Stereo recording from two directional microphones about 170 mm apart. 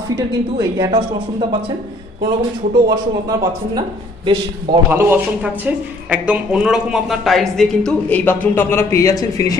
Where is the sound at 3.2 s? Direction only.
25° right (ahead or behind).